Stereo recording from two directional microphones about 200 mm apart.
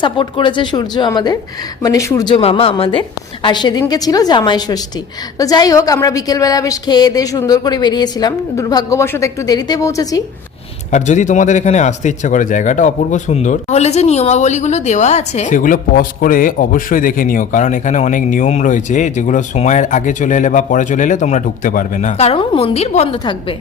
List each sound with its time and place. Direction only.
0.0 s a woman's voice: 25° left (ahead or behind)
10.9 s speech: 35° left (ahead or behind)